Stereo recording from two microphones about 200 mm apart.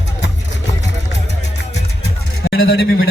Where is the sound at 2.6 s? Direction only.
65° left (ahead or behind).